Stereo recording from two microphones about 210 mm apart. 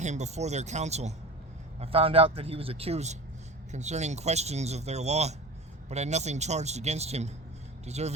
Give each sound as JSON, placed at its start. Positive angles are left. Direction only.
{"t": 0.0, "sound": "a man's voice", "side_deg": -35}